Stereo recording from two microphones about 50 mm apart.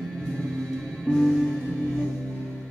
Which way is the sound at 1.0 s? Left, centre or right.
Centre.